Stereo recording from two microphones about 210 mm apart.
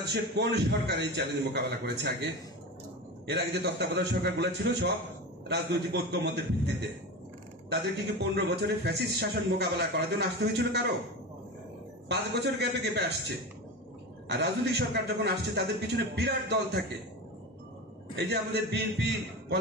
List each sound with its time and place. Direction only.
0.0 s a man's voice: 55° right (ahead or behind)
3.3 s a man's voice: 50° right (ahead or behind)
7.7 s a man's voice: 50° right (ahead or behind)
12.1 s a man's voice: 50° right (ahead or behind)
14.3 s a man's voice: 55° right (ahead or behind)
18.1 s a man's voice: 55° right (ahead or behind)